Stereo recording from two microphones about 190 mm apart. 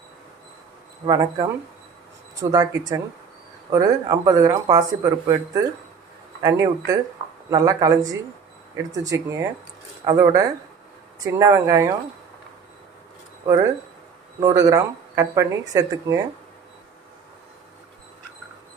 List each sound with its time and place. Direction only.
1.0 s speech: 20° right (ahead or behind)
13.5 s speech: 15° right (ahead or behind)